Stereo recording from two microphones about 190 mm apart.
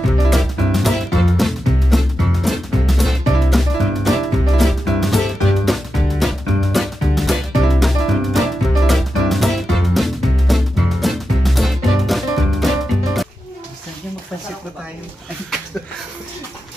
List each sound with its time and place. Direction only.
0.2 s music: centre (ahead or behind)